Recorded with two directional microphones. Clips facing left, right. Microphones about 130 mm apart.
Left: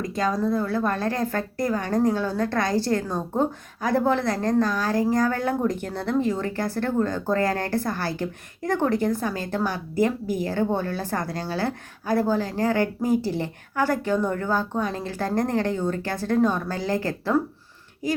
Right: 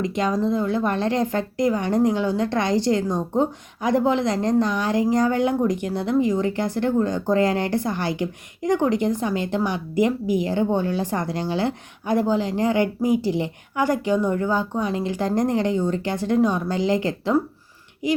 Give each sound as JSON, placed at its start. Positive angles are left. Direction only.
{"t": 0.0, "sound": "a woman's voice", "side_deg": -20}